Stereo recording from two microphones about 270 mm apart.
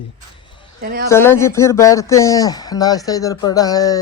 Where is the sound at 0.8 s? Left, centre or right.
Right.